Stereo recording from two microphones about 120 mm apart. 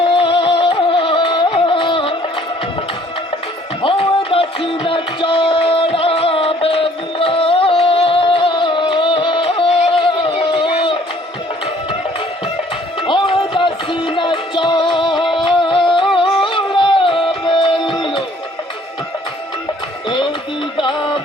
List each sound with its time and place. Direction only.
0.1 s music: 45° left (ahead or behind)
3.8 s music: 50° left (ahead or behind)
13.0 s music: 45° left (ahead or behind)
20.7 s music: 45° left (ahead or behind)